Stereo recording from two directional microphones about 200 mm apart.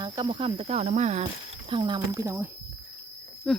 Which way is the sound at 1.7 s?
25° right (ahead or behind).